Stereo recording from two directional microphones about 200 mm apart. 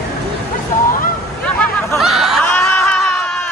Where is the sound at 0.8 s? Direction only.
45° left (ahead or behind).